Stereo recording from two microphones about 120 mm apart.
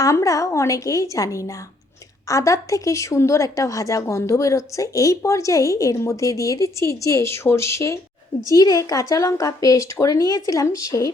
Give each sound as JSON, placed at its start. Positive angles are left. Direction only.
{"t": 0.0, "sound": "speech", "side_deg": 25}